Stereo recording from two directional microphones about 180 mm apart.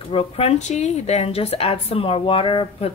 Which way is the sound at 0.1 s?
30° left (ahead or behind).